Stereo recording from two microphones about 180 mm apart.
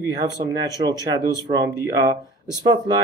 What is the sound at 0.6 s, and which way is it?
Speech, 20° right (ahead or behind).